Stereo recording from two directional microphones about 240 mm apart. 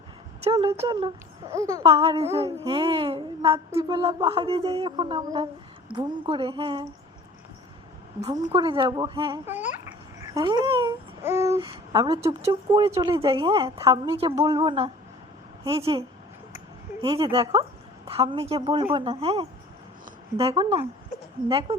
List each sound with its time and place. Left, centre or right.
0.4 s speech: right
1.8 s speech: right
8.2 s speech: right
17.0 s speech: right